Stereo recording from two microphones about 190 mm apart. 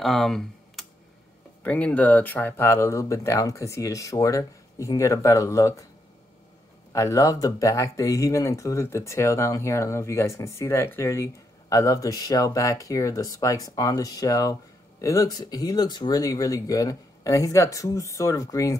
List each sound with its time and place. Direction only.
0.0 s speech: centre (ahead or behind); by 5.9 s 15° left (ahead or behind)
6.9 s speech: 15° left (ahead or behind)